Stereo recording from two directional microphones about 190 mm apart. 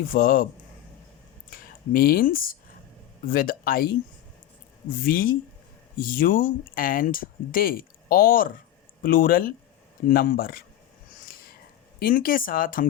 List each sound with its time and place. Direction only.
0.1 s speech: 50° left (ahead or behind)
1.5 s speech: 50° left (ahead or behind)
11.9 s speech: 50° left (ahead or behind)